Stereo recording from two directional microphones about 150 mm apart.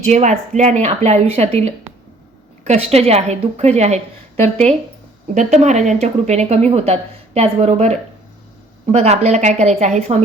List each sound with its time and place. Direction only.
0.1 s speech: 50° right (ahead or behind)
5.3 s speech: 55° right (ahead or behind)